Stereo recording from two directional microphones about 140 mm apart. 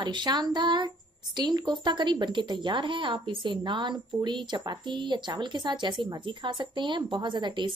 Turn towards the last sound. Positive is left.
turn(degrees=-35)  # may be behind; listen again after turning